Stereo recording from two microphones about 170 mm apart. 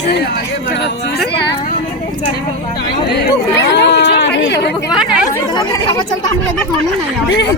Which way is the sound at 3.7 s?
80° left.